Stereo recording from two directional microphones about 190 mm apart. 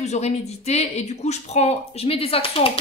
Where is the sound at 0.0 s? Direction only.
35° left (ahead or behind).